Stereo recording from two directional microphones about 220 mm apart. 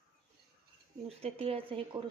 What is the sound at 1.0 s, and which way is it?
Speech, 25° right (ahead or behind).